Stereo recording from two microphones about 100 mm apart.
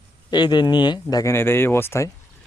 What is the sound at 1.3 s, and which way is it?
Speech, 25° left (ahead or behind).